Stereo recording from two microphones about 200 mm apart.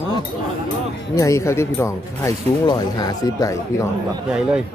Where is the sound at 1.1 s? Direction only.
15° left (ahead or behind).